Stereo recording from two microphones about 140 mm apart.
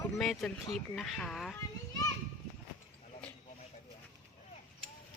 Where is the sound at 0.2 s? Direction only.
Centre (ahead or behind).